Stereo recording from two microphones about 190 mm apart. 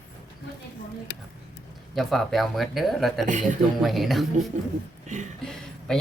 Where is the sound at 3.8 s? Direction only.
Centre (ahead or behind).